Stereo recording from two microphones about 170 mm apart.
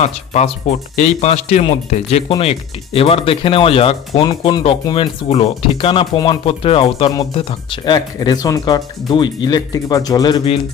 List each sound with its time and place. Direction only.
0.0 s speech: 40° left (ahead or behind)